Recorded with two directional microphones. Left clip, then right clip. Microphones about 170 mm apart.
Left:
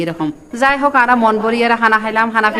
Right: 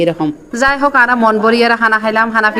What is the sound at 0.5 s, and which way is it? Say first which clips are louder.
A man's voice: right 1 dB; 15° right (ahead or behind).